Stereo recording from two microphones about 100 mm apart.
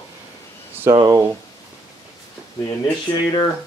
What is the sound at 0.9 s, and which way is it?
Speech, 35° right (ahead or behind).